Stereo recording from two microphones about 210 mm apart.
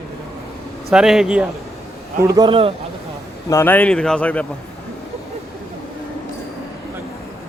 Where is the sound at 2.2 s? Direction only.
15° right (ahead or behind).